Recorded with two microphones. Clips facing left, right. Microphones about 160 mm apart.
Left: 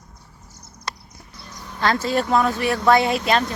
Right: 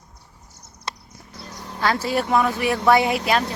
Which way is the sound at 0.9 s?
25° right (ahead or behind).